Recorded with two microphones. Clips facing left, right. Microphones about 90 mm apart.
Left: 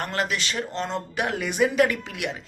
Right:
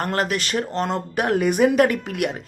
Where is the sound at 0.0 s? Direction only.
45° right (ahead or behind).